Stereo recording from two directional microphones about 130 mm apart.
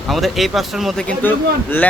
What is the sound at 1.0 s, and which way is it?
Speech, 10° left (ahead or behind).